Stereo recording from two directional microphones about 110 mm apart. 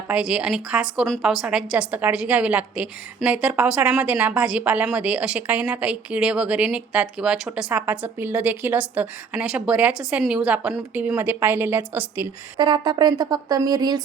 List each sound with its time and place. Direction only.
0.1 s a woman's voice: 10° right (ahead or behind)
7.7 s a woman's voice: 15° right (ahead or behind)
12.5 s speech: 45° right (ahead or behind)